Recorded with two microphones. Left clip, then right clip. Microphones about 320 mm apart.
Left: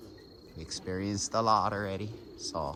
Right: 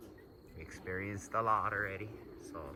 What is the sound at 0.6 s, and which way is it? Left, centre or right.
Speech, centre.